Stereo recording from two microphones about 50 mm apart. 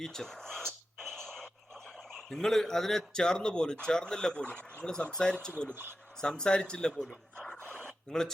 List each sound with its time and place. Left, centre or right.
0.0 s speech: centre
0.9 s radio: centre
2.1 s a man's voice: centre
7.3 s a sound: centre